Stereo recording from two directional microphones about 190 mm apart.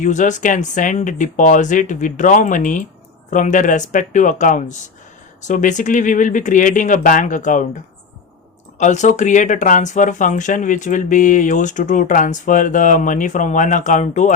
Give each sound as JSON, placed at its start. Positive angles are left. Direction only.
{"t": 0.0, "sound": "speech", "side_deg": 40}
{"t": 8.8, "sound": "speech", "side_deg": 40}